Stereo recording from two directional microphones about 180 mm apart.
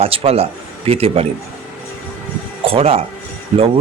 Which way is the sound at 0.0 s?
30° right (ahead or behind).